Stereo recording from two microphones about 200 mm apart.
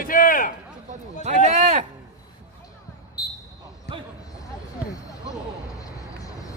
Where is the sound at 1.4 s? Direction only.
35° right (ahead or behind).